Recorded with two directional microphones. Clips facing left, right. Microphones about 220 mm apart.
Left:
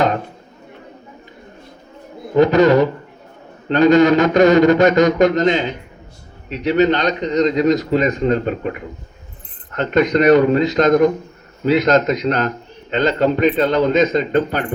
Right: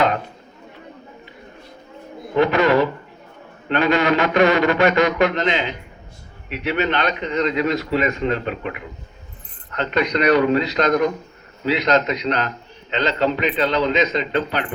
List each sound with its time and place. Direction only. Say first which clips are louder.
2.3 s a man's voice: left 5 dB; 40° left (ahead or behind)